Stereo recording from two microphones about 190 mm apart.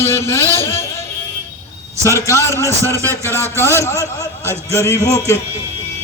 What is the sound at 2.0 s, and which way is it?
Speech, 15° left (ahead or behind).